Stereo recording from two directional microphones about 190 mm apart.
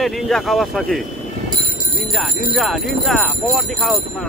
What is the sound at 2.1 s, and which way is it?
Speech, centre (ahead or behind).